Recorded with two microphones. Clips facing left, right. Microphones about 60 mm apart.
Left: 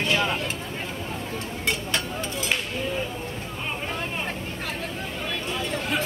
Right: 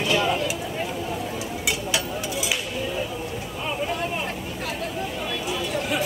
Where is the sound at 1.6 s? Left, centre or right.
Centre.